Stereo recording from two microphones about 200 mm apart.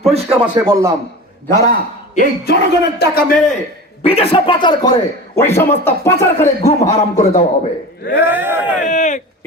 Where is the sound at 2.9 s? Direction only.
50° left (ahead or behind).